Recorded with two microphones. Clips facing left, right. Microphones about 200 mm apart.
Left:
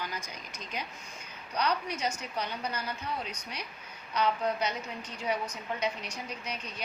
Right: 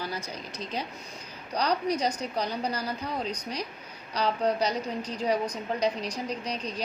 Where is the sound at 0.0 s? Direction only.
35° right (ahead or behind).